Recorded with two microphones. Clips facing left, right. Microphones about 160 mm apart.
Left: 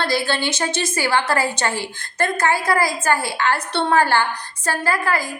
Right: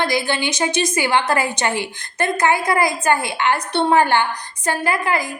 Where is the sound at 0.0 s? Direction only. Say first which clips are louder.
Right 1 dB; 15° right (ahead or behind).